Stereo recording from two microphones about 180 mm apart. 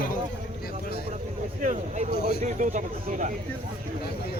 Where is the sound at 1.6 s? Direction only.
45° right (ahead or behind).